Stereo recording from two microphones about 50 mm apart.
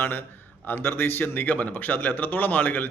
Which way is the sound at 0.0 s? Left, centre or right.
Left.